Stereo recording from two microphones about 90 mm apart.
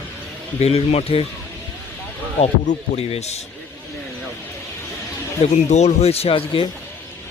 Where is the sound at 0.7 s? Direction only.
90° left.